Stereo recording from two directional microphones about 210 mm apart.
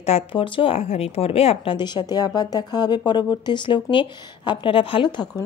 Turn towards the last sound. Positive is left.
turn(degrees=20)  # may be behind; listen again after turning